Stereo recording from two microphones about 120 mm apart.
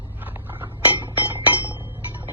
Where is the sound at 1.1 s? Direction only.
15° right (ahead or behind).